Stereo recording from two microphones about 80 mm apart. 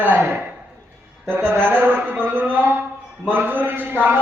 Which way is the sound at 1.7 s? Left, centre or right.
Right.